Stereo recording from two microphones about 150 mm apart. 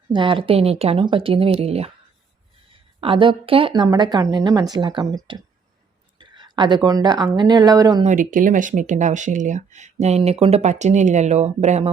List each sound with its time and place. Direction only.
0.1 s speech: 35° right (ahead or behind)
3.0 s speech: 35° right (ahead or behind)
8.0 s speech: 60° right (ahead or behind)